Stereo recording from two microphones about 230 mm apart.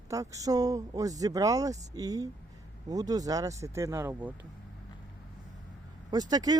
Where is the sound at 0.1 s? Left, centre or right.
Centre.